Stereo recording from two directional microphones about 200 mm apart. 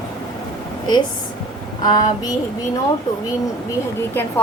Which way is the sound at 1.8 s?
20° left (ahead or behind).